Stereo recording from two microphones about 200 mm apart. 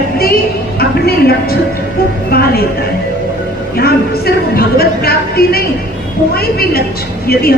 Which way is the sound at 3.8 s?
50° left (ahead or behind).